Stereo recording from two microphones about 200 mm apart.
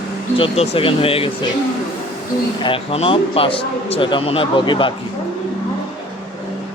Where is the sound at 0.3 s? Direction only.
30° left (ahead or behind).